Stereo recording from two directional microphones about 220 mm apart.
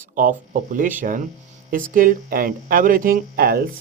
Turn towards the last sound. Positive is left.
turn(degrees=-40)  # may be behind; listen again after turning